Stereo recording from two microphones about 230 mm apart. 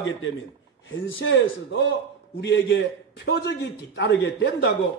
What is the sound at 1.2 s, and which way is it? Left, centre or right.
A man's voice, left.